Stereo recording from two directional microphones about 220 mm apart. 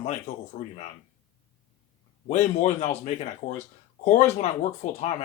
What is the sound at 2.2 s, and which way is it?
Speech, 30° left (ahead or behind).